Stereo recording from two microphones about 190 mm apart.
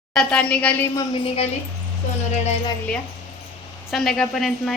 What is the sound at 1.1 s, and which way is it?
Speech, 30° left (ahead or behind).